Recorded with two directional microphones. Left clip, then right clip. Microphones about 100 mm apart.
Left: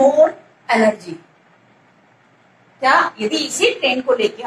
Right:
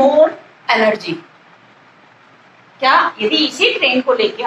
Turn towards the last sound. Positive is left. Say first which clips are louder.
# right 3 dB
turn(degrees=-35)  # may be behind; listen again after turning